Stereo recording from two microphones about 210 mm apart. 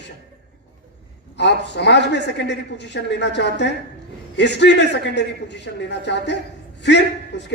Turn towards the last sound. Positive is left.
turn(degrees=55)  # may be behind; listen again after turning